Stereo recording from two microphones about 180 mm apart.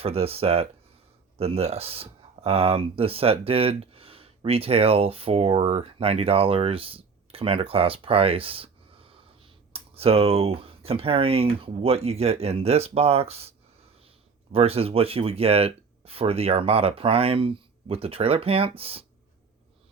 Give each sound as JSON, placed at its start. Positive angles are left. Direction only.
{"t": 0.0, "sound": "speech", "side_deg": -35}
{"t": 14.5, "sound": "speech", "side_deg": -35}